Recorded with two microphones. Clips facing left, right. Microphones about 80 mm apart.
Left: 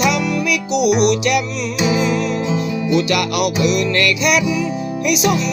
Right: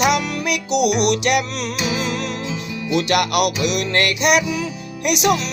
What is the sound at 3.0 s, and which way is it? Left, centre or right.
Music, right.